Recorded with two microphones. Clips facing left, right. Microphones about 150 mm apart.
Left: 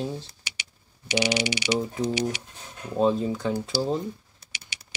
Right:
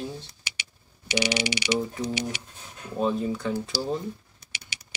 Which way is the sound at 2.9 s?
25° left (ahead or behind).